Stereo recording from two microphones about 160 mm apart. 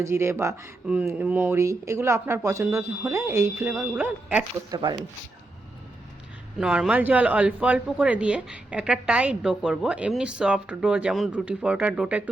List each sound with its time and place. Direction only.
0.0 s speech: 15° right (ahead or behind)
4.7 s speech: 25° right (ahead or behind)
6.6 s speech: 5° right (ahead or behind)